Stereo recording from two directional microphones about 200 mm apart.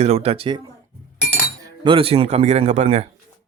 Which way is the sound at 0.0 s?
30° right (ahead or behind).